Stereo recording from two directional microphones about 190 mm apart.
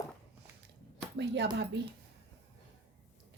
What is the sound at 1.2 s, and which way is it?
Speech, 65° right (ahead or behind).